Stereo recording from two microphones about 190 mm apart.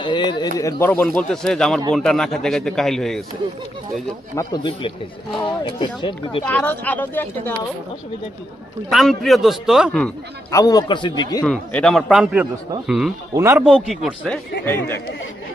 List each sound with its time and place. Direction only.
0.0 s a man's voice: 25° left (ahead or behind); by 3.2 s centre (ahead or behind)
4.4 s a man's voice: 25° left (ahead or behind)
6.4 s speech: 10° left (ahead or behind)
8.9 s a man's voice: centre (ahead or behind)
10.5 s a man's voice: 20° left (ahead or behind)
11.4 s a man's voice: 5° left (ahead or behind)
13.3 s a man's voice: 15° right (ahead or behind)
13.7 s a man's voice: centre (ahead or behind)